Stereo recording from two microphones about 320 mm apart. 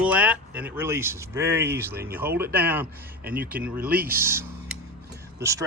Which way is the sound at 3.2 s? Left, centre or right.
Right.